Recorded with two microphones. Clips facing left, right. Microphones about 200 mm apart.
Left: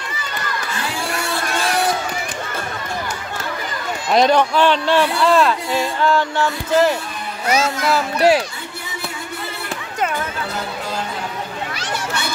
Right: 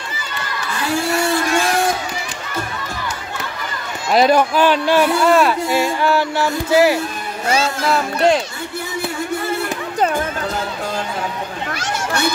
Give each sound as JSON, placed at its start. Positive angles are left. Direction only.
{"t": 4.1, "sound": "speech", "side_deg": -5}
{"t": 7.4, "sound": "music", "side_deg": -30}
{"t": 7.8, "sound": "speech", "side_deg": 5}
{"t": 11.8, "sound": "a sound", "side_deg": -45}